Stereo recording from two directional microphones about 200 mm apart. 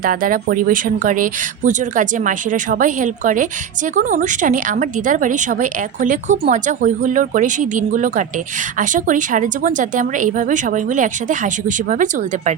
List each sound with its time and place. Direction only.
0.0 s speech: 45° right (ahead or behind)